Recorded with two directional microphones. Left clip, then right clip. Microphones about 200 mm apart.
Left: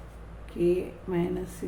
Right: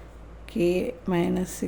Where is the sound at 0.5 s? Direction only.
50° right (ahead or behind).